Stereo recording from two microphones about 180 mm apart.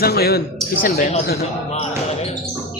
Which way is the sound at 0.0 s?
60° left (ahead or behind).